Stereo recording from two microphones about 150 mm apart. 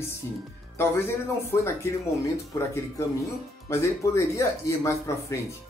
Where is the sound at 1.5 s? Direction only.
15° left (ahead or behind).